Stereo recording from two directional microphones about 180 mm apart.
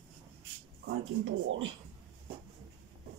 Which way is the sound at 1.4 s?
90° right.